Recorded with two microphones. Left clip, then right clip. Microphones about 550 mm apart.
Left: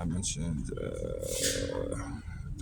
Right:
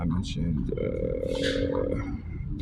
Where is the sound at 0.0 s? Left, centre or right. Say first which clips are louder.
Right 4 dB; left.